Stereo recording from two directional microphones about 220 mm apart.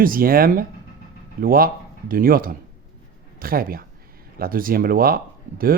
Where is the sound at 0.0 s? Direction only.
40° right (ahead or behind).